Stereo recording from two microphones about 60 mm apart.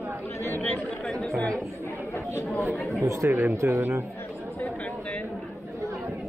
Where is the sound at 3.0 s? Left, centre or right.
Right.